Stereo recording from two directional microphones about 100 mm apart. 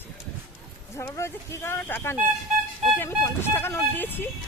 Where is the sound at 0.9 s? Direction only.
30° left (ahead or behind).